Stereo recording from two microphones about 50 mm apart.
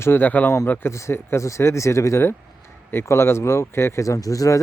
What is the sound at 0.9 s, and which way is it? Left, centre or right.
Speech, left.